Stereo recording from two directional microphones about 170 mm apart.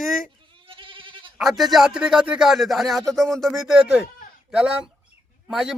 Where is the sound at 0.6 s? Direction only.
30° right (ahead or behind).